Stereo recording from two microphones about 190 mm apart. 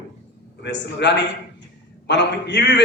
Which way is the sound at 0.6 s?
65° left (ahead or behind).